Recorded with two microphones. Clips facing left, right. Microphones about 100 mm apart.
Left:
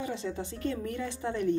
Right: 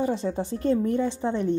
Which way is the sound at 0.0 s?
40° right (ahead or behind).